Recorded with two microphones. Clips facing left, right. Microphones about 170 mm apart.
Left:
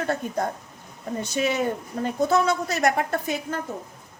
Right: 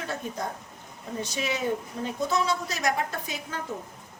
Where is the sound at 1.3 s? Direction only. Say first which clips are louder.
Left 5 dB; 55° left (ahead or behind).